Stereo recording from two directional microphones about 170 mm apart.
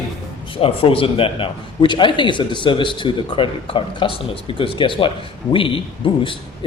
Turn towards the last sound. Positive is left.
turn(degrees=30)  # may be behind; listen again after turning